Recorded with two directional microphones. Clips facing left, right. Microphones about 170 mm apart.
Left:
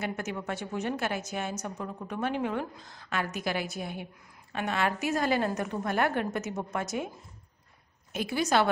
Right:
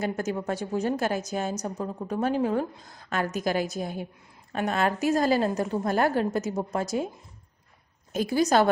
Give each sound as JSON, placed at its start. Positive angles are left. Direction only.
{"t": 0.0, "sound": "a woman's voice", "side_deg": -35}
{"t": 8.1, "sound": "a woman's voice", "side_deg": -40}